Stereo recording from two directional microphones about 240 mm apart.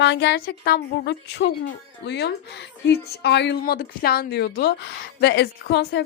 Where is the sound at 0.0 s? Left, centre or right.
Left.